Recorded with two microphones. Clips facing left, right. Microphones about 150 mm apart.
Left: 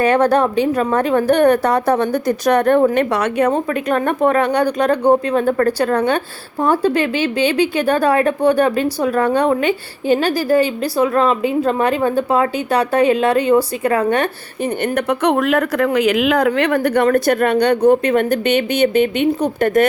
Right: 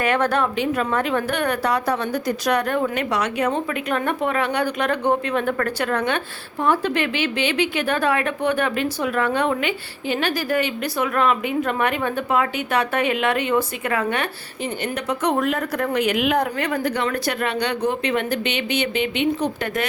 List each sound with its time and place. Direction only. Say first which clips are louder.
0.0 s a woman's voice: left 7 dB; 40° left (ahead or behind)